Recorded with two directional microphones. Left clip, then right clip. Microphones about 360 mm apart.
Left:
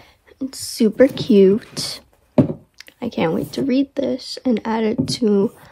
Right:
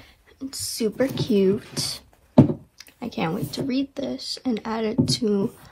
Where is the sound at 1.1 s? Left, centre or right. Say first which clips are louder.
Left 8 dB; left.